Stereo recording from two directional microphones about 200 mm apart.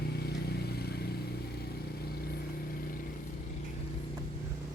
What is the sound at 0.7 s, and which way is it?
Vehicle, 50° left (ahead or behind).